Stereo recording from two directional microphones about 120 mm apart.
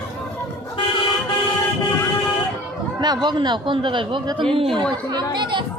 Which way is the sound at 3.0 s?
35° right (ahead or behind).